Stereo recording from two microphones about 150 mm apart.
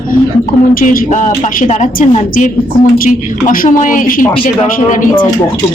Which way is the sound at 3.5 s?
65° left (ahead or behind).